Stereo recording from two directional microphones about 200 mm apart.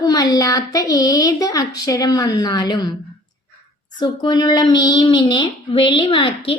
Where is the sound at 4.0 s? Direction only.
20° left (ahead or behind).